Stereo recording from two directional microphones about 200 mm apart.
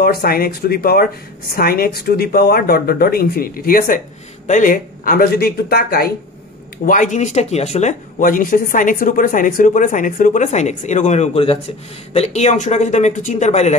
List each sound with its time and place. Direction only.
0.0 s speech: 50° left (ahead or behind)
6.8 s speech: 40° left (ahead or behind)